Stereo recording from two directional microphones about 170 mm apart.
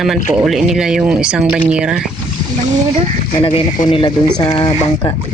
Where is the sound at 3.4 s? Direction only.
30° left (ahead or behind).